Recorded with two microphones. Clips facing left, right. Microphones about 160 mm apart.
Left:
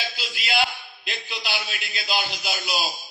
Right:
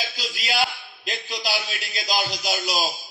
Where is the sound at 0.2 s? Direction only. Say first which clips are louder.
Right 1 dB; 40° right (ahead or behind).